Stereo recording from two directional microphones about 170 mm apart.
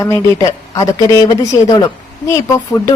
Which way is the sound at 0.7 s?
20° left (ahead or behind).